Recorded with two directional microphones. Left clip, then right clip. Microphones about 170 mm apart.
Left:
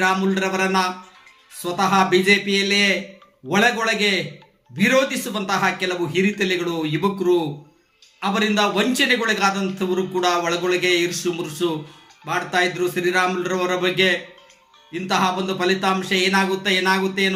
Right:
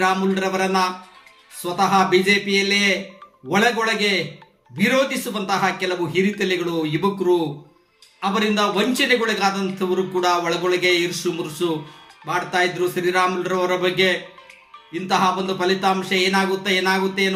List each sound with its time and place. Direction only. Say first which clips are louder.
0.0 s a man's voice: even; 20° left (ahead or behind)